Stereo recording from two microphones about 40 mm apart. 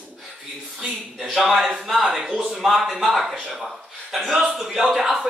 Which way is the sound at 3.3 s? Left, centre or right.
Centre.